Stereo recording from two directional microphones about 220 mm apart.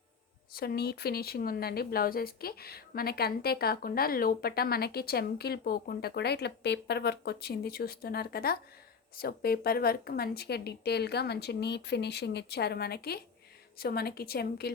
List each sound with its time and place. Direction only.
0.5 s speech: 45° left (ahead or behind)